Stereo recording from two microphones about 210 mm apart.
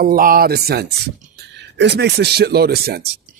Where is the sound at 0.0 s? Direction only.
45° right (ahead or behind).